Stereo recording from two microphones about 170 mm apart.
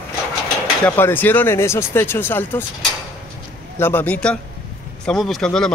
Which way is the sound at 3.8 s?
10° left (ahead or behind).